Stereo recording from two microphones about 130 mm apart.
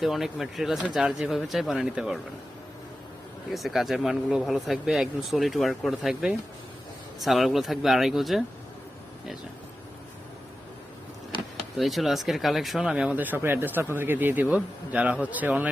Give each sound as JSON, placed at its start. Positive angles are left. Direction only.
{"t": 0.0, "sound": "speech", "side_deg": 0}
{"t": 3.5, "sound": "speech", "side_deg": 0}
{"t": 11.8, "sound": "speech", "side_deg": 0}